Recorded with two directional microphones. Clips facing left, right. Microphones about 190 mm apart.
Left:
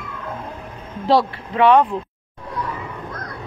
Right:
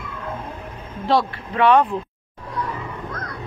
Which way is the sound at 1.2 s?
5° left (ahead or behind).